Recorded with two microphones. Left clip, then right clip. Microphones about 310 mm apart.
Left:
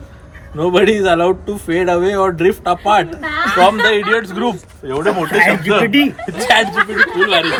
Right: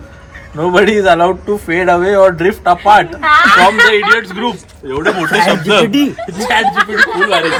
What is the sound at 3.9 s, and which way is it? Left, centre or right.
Speech, left.